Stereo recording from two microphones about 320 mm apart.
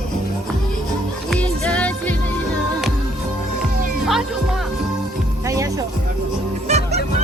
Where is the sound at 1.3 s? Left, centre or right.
Centre.